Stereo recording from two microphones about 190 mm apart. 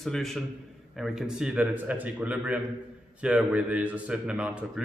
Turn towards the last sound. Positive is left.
turn(degrees=-5)  # may be behind; listen again after turning